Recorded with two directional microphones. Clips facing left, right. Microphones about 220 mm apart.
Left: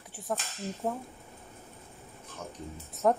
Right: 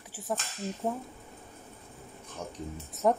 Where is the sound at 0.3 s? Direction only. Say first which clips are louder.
Even; centre (ahead or behind).